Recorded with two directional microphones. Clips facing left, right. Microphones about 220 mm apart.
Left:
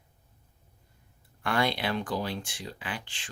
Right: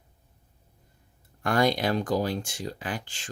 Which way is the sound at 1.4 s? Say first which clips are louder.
Right 5 dB; 40° right (ahead or behind).